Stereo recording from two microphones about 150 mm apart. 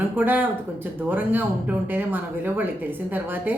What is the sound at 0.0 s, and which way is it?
Speech, 10° right (ahead or behind).